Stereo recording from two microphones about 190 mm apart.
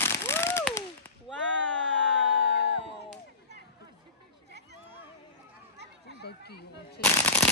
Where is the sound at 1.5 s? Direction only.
75° right (ahead or behind).